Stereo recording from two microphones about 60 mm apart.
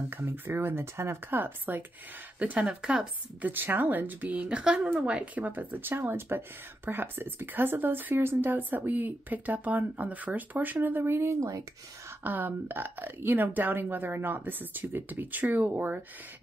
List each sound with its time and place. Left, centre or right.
0.1 s a woman's voice: right
2.3 s speech: right
3.4 s a woman's voice: right
12.2 s a woman's voice: right